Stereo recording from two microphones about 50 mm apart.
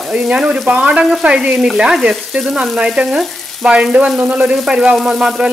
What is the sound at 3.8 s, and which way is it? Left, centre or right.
Frying, centre.